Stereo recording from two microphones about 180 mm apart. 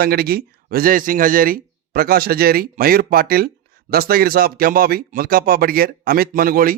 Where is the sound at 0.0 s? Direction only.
60° right (ahead or behind).